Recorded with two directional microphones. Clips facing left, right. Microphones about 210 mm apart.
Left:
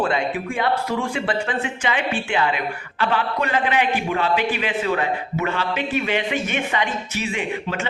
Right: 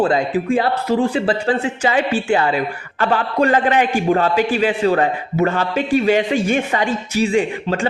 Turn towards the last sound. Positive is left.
turn(degrees=-40)  # may be behind; listen again after turning